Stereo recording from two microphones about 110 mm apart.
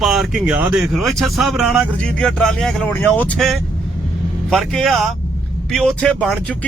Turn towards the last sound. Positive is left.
turn(degrees=10)  # may be behind; listen again after turning